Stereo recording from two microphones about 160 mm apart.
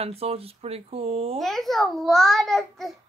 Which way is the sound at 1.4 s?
Centre (ahead or behind).